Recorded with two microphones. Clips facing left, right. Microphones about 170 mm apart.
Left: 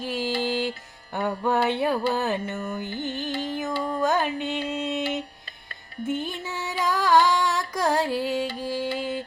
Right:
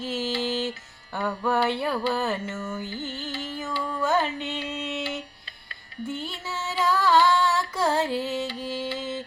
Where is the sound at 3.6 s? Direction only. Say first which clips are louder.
Left 3 dB; 40° left (ahead or behind).